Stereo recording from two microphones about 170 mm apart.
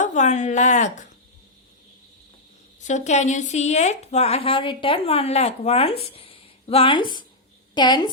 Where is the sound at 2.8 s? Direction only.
45° left (ahead or behind); by 8.1 s 25° left (ahead or behind).